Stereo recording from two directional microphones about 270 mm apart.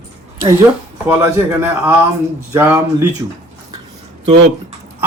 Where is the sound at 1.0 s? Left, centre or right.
Centre.